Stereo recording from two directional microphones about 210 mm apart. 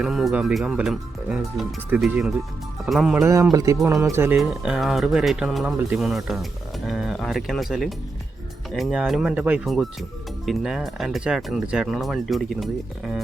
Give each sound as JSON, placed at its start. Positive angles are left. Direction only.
{"t": 0.0, "sound": "speech", "side_deg": 0}
{"t": 3.2, "sound": "speech", "side_deg": -15}
{"t": 4.4, "sound": "speech", "side_deg": 0}